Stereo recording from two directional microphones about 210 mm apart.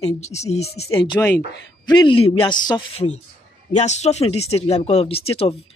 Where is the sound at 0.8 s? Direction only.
20° left (ahead or behind).